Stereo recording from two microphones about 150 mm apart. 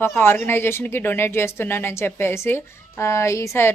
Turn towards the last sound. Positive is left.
turn(degrees=15)  # may be behind; listen again after turning